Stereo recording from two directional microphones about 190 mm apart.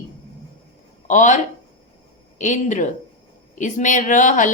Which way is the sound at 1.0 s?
40° left (ahead or behind).